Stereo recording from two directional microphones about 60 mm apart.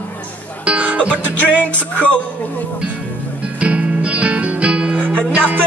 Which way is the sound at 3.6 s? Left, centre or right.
Centre.